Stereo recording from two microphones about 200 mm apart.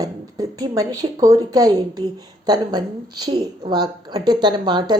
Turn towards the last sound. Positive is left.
turn(degrees=-20)  # may be behind; listen again after turning